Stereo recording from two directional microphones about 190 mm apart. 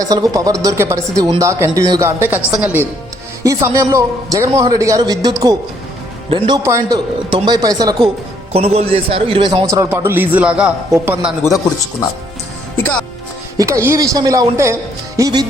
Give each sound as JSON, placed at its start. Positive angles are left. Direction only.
{"t": 0.0, "sound": "a man's voice", "side_deg": -20}
{"t": 6.3, "sound": "speech", "side_deg": -25}
{"t": 6.7, "sound": "a man's voice", "side_deg": -15}
{"t": 11.4, "sound": "speech", "side_deg": 15}
{"t": 13.6, "sound": "a man's voice", "side_deg": -15}